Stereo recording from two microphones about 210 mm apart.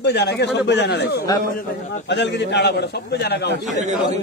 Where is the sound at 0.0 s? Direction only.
55° left (ahead or behind).